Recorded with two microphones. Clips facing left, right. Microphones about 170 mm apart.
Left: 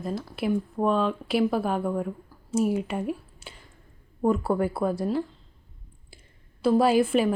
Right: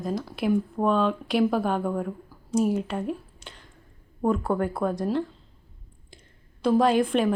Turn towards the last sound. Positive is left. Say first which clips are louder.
# even
turn(degrees=5)  # may be behind; listen again after turning